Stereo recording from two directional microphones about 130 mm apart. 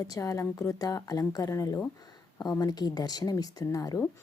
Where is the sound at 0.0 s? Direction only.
25° left (ahead or behind).